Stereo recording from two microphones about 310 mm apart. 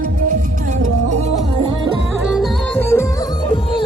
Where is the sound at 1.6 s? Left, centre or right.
Centre.